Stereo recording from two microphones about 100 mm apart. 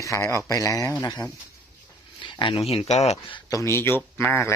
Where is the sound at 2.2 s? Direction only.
55° left (ahead or behind).